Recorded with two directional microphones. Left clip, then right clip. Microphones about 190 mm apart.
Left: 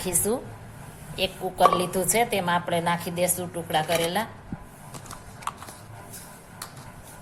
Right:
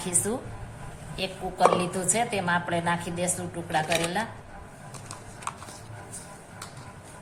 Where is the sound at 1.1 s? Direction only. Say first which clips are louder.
Left 4 dB; 35° left (ahead or behind).